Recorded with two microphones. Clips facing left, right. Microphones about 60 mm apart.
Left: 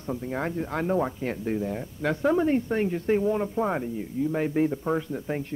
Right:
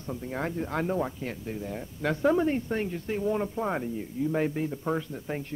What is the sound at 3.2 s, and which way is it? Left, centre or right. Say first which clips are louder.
Speech: left 3 dB; centre.